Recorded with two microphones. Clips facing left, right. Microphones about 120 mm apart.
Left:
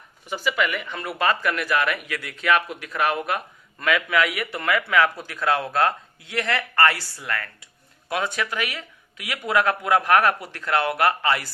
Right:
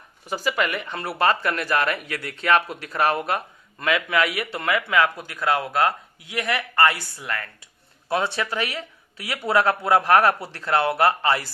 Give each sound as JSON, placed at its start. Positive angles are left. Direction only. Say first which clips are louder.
{"t": 0.3, "sound": "speech", "louder": "even", "side_deg": -40}